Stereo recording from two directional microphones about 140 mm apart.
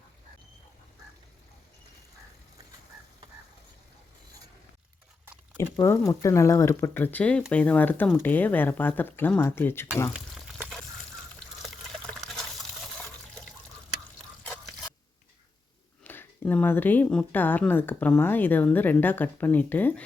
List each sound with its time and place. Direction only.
5.5 s speech: 20° left (ahead or behind)
11.3 s water: 5° left (ahead or behind)
16.0 s speech: 15° left (ahead or behind)